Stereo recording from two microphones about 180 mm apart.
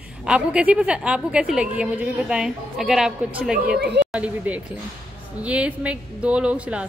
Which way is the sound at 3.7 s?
65° right (ahead or behind).